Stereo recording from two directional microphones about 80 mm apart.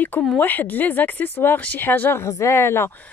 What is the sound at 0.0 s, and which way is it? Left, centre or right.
Speech, left.